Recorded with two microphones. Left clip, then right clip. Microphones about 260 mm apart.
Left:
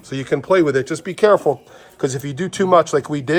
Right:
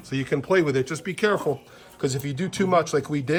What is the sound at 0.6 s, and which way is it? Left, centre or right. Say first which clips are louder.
Speech: left 7 dB; left.